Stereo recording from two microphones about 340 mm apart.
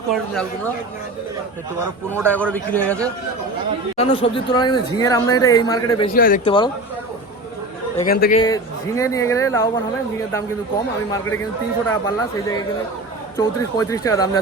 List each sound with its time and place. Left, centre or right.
0.1 s a man's voice: centre
2.2 s a man's voice: centre
3.9 s speech: centre
6.1 s speech: left
7.9 s speech: left
8.4 s speech: centre
11.9 s speech: centre